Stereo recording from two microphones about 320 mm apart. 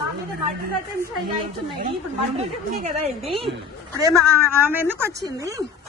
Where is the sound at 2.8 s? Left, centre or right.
Centre.